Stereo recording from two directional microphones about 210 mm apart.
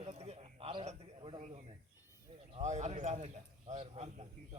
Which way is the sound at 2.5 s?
35° right (ahead or behind).